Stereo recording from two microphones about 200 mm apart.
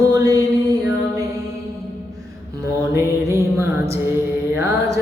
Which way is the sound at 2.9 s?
15° right (ahead or behind).